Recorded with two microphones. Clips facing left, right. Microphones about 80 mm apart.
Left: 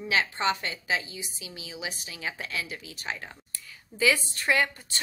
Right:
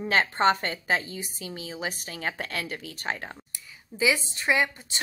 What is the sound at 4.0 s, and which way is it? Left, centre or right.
A woman's voice, centre.